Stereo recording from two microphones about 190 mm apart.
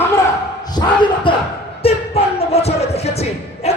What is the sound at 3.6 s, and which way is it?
Bow-wow, 35° left (ahead or behind).